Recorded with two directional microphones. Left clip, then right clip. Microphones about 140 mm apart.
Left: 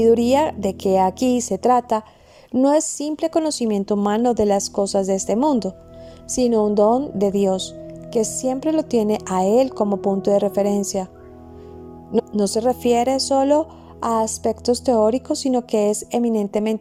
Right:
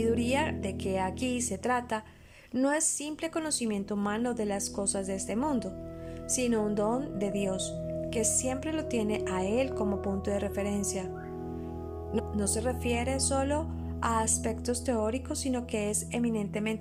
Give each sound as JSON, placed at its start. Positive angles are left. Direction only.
{"t": 0.0, "sound": "a woman's voice", "side_deg": 45}
{"t": 2.5, "sound": "speech", "side_deg": 35}
{"t": 12.1, "sound": "speech", "side_deg": 45}